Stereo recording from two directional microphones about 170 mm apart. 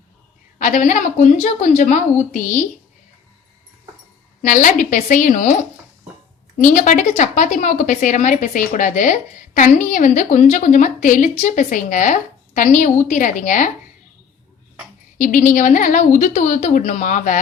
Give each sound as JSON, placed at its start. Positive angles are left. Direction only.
{"t": 0.6, "sound": "a woman's voice", "side_deg": 50}
{"t": 4.4, "sound": "a woman's voice", "side_deg": 50}
{"t": 6.6, "sound": "a woman's voice", "side_deg": 50}
{"t": 15.2, "sound": "a woman's voice", "side_deg": 50}